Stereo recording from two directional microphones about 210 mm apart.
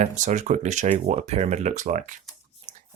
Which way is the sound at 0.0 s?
35° right (ahead or behind).